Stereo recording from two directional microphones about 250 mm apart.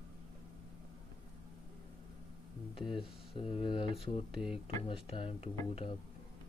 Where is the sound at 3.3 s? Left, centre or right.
Left.